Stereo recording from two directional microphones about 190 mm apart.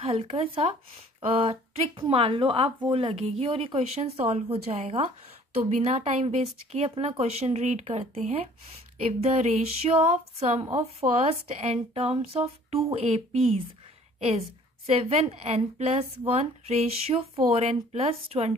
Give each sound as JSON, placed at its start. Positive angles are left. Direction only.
{"t": 0.0, "sound": "a woman's voice", "side_deg": -30}
{"t": 14.9, "sound": "a woman's voice", "side_deg": -30}